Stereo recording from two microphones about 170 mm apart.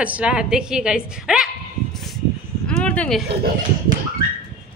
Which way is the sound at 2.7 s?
5° left (ahead or behind).